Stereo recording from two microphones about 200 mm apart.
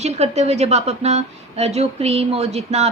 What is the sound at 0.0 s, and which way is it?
A woman's voice, 35° right (ahead or behind).